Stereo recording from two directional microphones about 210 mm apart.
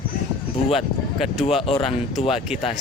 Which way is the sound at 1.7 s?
25° left (ahead or behind).